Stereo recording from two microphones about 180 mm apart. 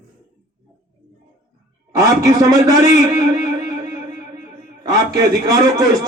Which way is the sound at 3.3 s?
15° right (ahead or behind).